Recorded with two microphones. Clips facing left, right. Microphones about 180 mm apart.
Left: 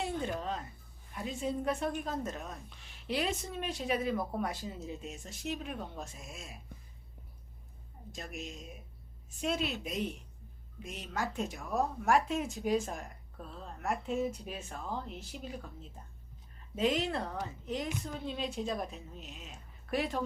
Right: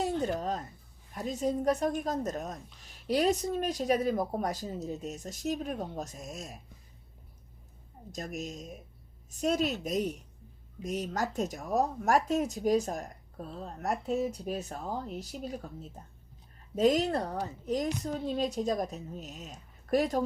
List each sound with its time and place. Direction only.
0.0 s a sound: 40° right (ahead or behind)
1.1 s speech: 40° right (ahead or behind)
8.1 s speech: 40° right (ahead or behind)